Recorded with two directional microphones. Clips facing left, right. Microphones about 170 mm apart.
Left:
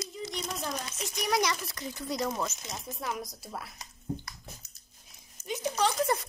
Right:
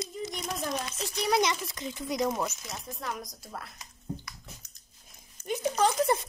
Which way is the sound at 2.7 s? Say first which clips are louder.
Left 1 dB; 5° left (ahead or behind).